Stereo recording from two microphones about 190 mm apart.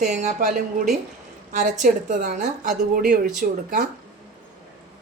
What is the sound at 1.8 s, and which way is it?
Speech, 40° right (ahead or behind).